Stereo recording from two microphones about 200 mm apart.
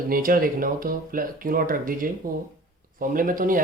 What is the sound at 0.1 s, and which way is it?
Speech, 45° right (ahead or behind).